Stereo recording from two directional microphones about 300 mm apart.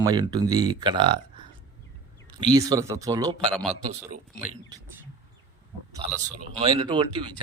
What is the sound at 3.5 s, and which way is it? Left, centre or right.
Speech, centre.